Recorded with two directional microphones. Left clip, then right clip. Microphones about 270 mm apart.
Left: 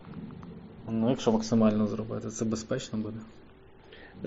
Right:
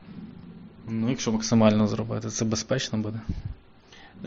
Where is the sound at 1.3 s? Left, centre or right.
Right.